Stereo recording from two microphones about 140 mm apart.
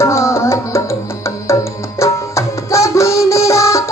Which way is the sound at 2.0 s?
20° left (ahead or behind).